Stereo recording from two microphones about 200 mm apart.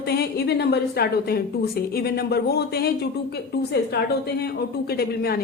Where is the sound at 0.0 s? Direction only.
50° left (ahead or behind).